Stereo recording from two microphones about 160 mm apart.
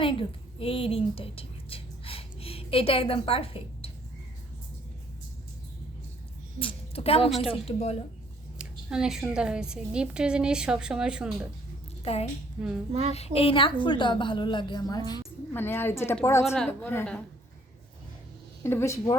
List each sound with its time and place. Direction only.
0.0 s a woman's voice: 35° left (ahead or behind)
6.6 s a woman's voice: 35° left (ahead or behind)
7.3 s a woman's voice: centre (ahead or behind)
7.6 s a woman's voice: 40° left (ahead or behind)
8.5 s a woman's voice: 5° right (ahead or behind)
12.0 s a woman's voice: 40° left (ahead or behind)
12.5 s a woman's voice: 5° right (ahead or behind)
12.9 s speech: 40° right (ahead or behind)
13.1 s a woman's voice: 40° left (ahead or behind)
15.5 s a woman's voice: 15° left (ahead or behind)
18.6 s a woman's voice: 15° left (ahead or behind)